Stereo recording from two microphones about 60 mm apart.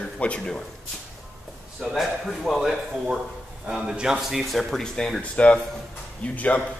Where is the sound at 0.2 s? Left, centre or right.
Centre.